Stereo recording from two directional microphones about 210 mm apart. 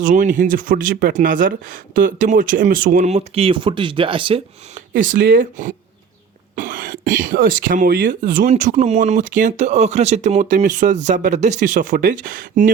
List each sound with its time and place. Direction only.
0.0 s speech: 40° right (ahead or behind)
5.0 s speech: 40° right (ahead or behind)